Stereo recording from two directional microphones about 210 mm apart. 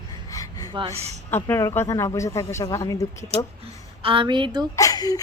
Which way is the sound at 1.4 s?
10° left (ahead or behind).